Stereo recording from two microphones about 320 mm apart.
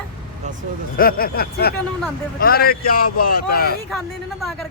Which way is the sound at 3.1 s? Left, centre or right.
Left.